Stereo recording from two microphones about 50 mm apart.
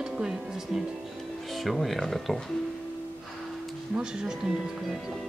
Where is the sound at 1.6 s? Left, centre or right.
Centre.